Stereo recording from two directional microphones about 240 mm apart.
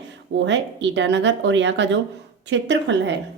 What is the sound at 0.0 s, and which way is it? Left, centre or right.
A woman's voice, right.